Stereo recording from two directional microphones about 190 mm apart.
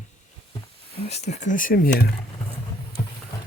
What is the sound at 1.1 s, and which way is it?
Speech, 35° left (ahead or behind).